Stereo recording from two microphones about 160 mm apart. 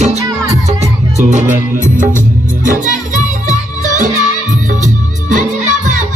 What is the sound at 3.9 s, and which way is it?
Music, 50° right (ahead or behind).